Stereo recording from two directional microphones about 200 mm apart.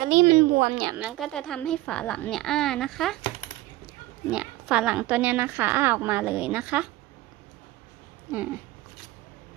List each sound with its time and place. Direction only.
0.0 s speech: 35° right (ahead or behind)
0.9 s a woman's voice: 5° right (ahead or behind)
4.3 s speech: 5° right (ahead or behind)